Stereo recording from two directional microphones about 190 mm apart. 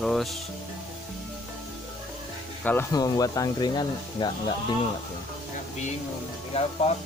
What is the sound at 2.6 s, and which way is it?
Speech, 10° left (ahead or behind).